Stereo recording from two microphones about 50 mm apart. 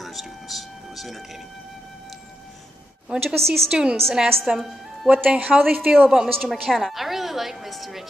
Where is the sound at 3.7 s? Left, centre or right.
Centre.